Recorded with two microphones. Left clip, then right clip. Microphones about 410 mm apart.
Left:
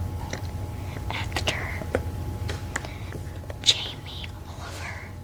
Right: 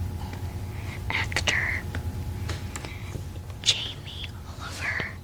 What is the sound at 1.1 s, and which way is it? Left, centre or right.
Whispering, right.